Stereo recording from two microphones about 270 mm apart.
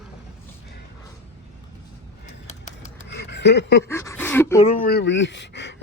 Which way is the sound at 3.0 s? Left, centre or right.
Left.